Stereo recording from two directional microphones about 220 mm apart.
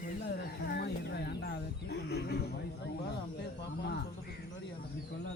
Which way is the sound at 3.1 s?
50° left (ahead or behind).